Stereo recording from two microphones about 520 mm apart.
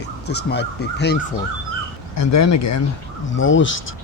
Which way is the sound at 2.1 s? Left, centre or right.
Left.